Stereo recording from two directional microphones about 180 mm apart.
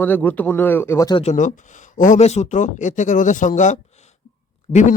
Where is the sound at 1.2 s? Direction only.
40° left (ahead or behind).